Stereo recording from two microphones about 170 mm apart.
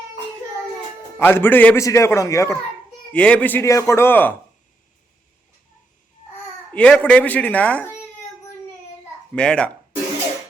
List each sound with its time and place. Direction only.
1.2 s a man's voice: 10° left (ahead or behind)
3.1 s a man's voice: 5° left (ahead or behind)
6.7 s a man's voice: 10° left (ahead or behind)
9.3 s speech: 5° left (ahead or behind)